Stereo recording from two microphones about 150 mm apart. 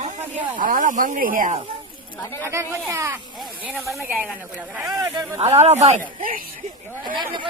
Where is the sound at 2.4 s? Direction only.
20° right (ahead or behind).